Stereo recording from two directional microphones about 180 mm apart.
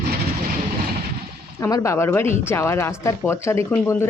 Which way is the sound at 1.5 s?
15° left (ahead or behind).